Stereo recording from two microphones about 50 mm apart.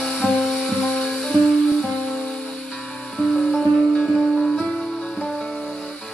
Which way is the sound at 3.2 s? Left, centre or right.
Centre.